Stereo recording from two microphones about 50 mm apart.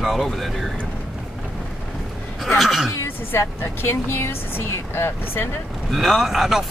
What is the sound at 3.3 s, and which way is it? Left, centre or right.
Speech, left.